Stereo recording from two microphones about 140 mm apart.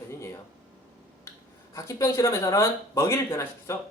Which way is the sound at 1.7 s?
25° left (ahead or behind).